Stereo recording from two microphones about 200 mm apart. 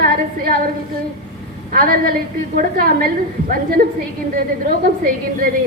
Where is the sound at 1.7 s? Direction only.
45° right (ahead or behind).